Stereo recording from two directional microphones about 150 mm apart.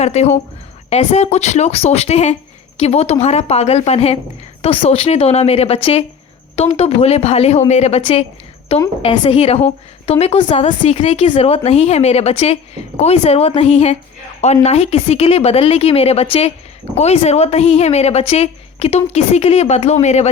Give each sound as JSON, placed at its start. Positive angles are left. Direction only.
{"t": 0.0, "sound": "a woman's voice", "side_deg": 45}